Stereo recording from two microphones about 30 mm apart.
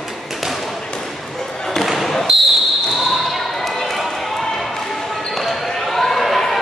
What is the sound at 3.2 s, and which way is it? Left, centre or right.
Basketball bounce, centre.